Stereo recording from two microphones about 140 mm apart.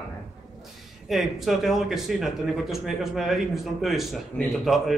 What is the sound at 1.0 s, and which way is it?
A man's voice, centre (ahead or behind).